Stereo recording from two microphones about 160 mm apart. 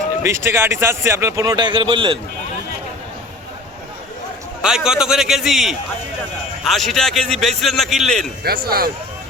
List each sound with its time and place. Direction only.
0.2 s a man's voice: 15° right (ahead or behind)
4.6 s a man's voice: 5° right (ahead or behind)
8.4 s speech: 70° right (ahead or behind)